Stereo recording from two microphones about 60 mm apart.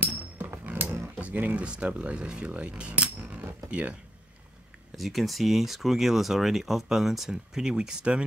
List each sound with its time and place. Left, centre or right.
0.0 s a sound: right
1.7 s speech: centre
2.5 s cutlery: centre
4.9 s speech: centre